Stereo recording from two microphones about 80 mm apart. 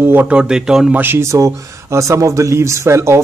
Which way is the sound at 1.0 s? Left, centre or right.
Right.